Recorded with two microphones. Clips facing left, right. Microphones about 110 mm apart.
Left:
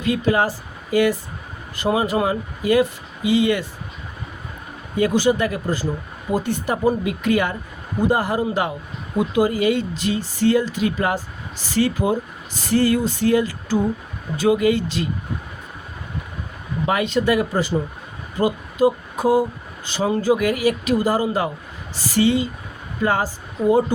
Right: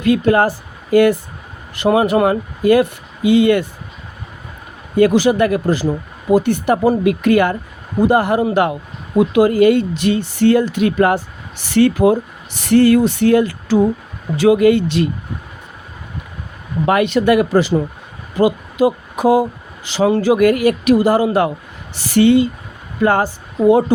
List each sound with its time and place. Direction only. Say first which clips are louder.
0.0 s speech: right 6 dB; 60° right (ahead or behind)
1.7 s speech: right 6 dB; 70° right (ahead or behind)
4.9 s speech: right 6 dB; 80° right
6.3 s speech: right 8 dB; 65° right (ahead or behind)
9.1 s speech: right 6 dB; 80° right
9.5 s speech: right 8 dB; 55° right (ahead or behind)
14.3 s speech: right 6 dB; 85° right
14.6 s speech: right 7 dB; 60° right (ahead or behind)
16.8 s a woman's voice: right 6 dB; 65° right (ahead or behind)